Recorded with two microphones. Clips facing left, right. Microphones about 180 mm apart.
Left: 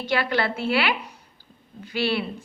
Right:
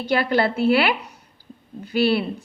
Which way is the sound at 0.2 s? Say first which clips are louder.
Right 5 dB; 50° right (ahead or behind).